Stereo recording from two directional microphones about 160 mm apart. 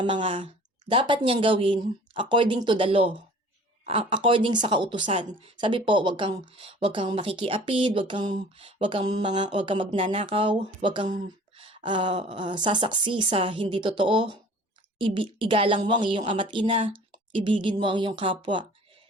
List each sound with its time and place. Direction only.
0.0 s speech: 35° right (ahead or behind)